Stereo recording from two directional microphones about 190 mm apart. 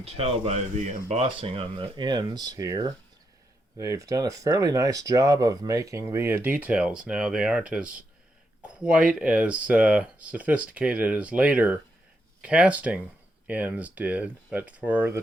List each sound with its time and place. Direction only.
0.0 s speech: 35° right (ahead or behind); by 7.6 s 5° right (ahead or behind)
8.6 s speech: 5° right (ahead or behind)